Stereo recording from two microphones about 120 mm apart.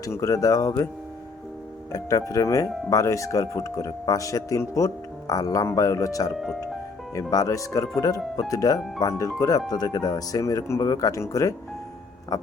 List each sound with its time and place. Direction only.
0.0 s speech: 25° left (ahead or behind)
1.9 s speech: 30° left (ahead or behind)
6.3 s speech: centre (ahead or behind)
7.2 s speech: 30° left (ahead or behind)